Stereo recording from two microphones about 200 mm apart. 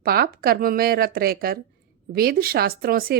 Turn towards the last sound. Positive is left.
turn(degrees=-50)  # may be behind; listen again after turning